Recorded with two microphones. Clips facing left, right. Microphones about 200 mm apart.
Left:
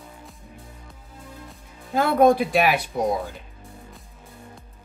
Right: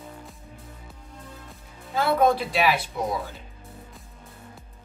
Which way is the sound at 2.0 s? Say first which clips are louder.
Left 4 dB; 50° left (ahead or behind).